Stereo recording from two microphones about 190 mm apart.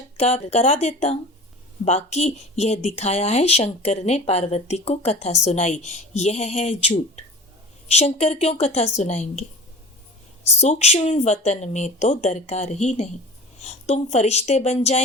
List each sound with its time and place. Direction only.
0.2 s speech: 35° left (ahead or behind)
10.6 s speech: 35° left (ahead or behind)